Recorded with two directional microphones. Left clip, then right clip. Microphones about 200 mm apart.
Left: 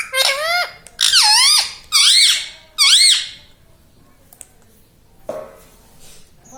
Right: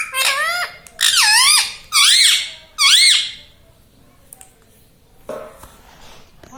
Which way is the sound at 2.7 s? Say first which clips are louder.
Even; 10° left (ahead or behind).